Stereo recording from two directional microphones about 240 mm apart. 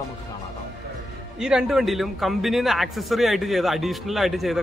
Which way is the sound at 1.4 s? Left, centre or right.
Centre.